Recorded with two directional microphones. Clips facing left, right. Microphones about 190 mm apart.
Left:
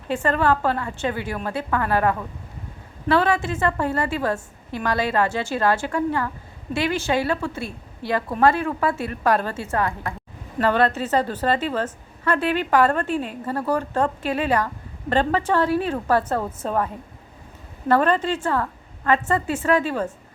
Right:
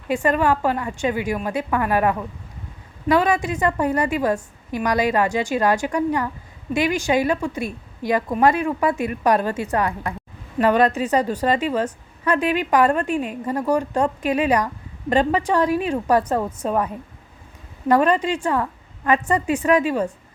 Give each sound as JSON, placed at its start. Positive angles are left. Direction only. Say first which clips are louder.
{"t": 0.1, "sound": "a woman's voice", "louder": "right 2 dB", "side_deg": -15}